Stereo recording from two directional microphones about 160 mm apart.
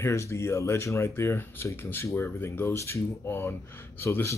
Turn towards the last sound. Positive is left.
turn(degrees=15)  # may be behind; listen again after turning